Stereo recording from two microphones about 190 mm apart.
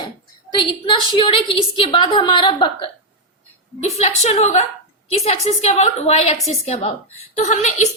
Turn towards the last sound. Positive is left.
turn(degrees=35)  # may be behind; listen again after turning